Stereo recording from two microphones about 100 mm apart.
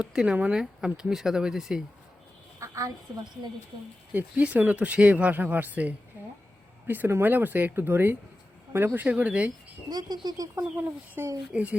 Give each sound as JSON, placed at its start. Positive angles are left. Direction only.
{"t": 0.0, "sound": "speech", "side_deg": -10}
{"t": 2.6, "sound": "a sound", "side_deg": -35}
{"t": 4.1, "sound": "speech", "side_deg": -15}
{"t": 9.9, "sound": "speech", "side_deg": -40}
{"t": 10.6, "sound": "speech", "side_deg": -20}